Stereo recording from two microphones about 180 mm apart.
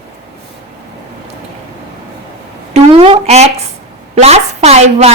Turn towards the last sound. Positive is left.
turn(degrees=-35)  # may be behind; listen again after turning